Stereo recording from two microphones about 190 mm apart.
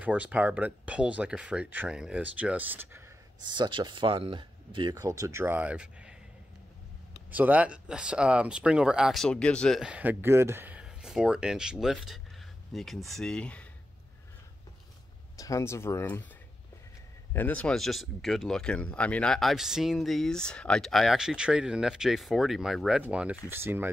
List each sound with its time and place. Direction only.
0.0 s speech: 10° right (ahead or behind)
3.4 s speech: 25° right (ahead or behind); by 6.1 s 5° right (ahead or behind)
7.2 s speech: 10° right (ahead or behind)
15.3 s speech: 15° left (ahead or behind)
17.3 s speech: 10° left (ahead or behind); by 23.9 s 10° right (ahead or behind)